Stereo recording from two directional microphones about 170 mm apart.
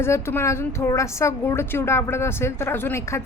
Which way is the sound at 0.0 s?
15° left (ahead or behind).